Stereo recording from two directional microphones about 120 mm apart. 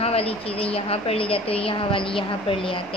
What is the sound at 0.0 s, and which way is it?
A woman's voice, 55° left (ahead or behind).